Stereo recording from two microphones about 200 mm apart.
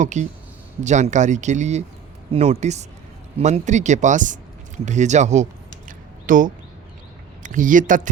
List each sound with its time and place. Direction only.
0.0 s a man's voice: 35° right (ahead or behind)